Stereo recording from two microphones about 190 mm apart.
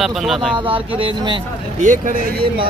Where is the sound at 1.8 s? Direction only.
40° right (ahead or behind).